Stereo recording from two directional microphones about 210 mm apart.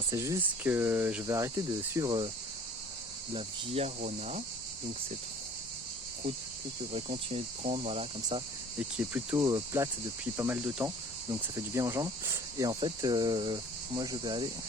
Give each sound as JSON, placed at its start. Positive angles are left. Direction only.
{"t": 0.1, "sound": "cricket", "side_deg": -15}
{"t": 3.3, "sound": "cricket", "side_deg": -30}
{"t": 6.9, "sound": "speech", "side_deg": -30}
{"t": 9.0, "sound": "cricket", "side_deg": -10}